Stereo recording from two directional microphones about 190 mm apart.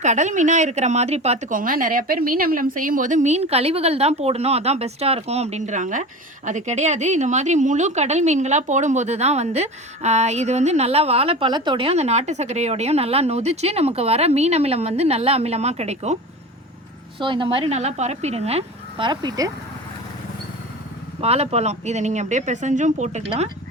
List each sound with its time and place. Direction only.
0.0 s a woman's voice: 40° right (ahead or behind)
17.2 s speech: 25° right (ahead or behind)
21.2 s a woman's voice: 35° right (ahead or behind)